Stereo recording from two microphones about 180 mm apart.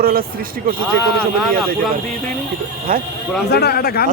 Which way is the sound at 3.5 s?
60° left (ahead or behind).